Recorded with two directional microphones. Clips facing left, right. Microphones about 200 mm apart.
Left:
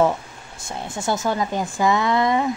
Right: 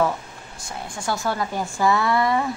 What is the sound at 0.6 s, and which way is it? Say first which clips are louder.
Speech: left 4 dB; 25° left (ahead or behind).